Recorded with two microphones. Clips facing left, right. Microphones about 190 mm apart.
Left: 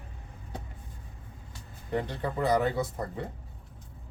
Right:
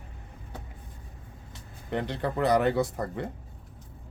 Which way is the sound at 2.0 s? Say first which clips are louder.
Right 3 dB; 75° right (ahead or behind).